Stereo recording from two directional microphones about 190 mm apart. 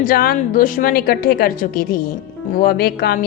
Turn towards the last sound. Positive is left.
turn(degrees=55)  # may be behind; listen again after turning